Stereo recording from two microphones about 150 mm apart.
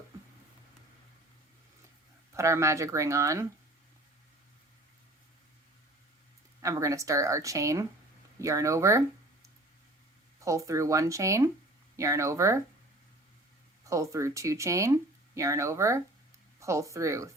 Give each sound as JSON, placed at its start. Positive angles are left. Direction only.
{"t": 2.3, "sound": "speech", "side_deg": -20}
{"t": 6.6, "sound": "speech", "side_deg": -20}
{"t": 13.8, "sound": "speech", "side_deg": -20}